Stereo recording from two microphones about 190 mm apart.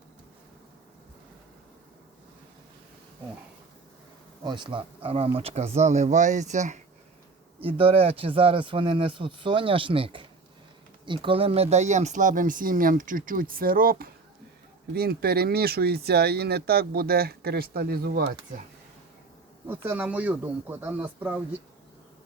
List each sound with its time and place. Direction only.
4.4 s speech: 25° right (ahead or behind); by 18.6 s 50° right (ahead or behind)
19.6 s speech: 10° right (ahead or behind)